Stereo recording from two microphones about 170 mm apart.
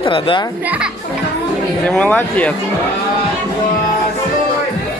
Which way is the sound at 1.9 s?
5° left (ahead or behind).